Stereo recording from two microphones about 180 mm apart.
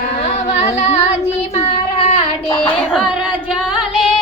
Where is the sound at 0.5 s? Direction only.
40° left (ahead or behind).